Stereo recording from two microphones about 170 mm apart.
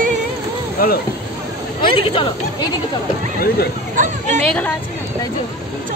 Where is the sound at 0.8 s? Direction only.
60° left (ahead or behind).